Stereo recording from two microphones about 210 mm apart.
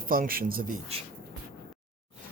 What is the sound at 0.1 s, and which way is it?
Speech, 45° right (ahead or behind).